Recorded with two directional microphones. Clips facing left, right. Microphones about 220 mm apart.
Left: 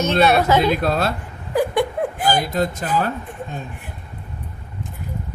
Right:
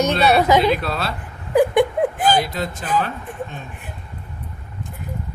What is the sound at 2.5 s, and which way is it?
Speech, 40° left (ahead or behind).